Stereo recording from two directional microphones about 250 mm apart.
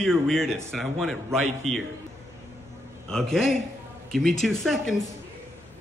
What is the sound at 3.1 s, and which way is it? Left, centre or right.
A man's voice, centre.